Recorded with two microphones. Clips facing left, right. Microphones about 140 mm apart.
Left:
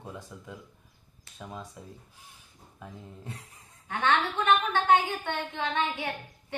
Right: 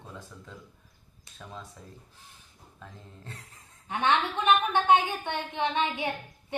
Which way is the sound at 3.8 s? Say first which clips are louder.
Even; 15° right (ahead or behind).